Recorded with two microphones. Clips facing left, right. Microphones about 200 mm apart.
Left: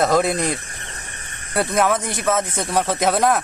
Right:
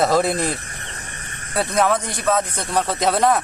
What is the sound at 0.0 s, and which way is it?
Speech, centre (ahead or behind).